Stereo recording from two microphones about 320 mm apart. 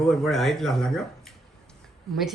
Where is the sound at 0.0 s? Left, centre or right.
Centre.